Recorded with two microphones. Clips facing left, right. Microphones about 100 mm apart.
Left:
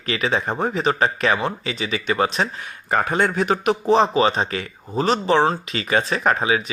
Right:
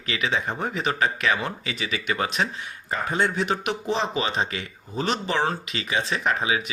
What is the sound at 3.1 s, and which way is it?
Speech, 50° left (ahead or behind).